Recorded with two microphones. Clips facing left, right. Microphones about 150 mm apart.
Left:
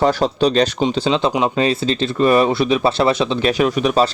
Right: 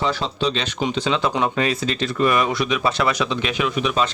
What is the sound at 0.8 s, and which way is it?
Speech, 30° left (ahead or behind).